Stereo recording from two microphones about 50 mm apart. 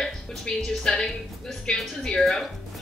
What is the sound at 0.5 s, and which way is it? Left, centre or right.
A woman's voice, centre.